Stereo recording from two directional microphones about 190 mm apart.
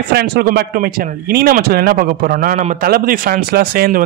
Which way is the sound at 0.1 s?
55° right (ahead or behind).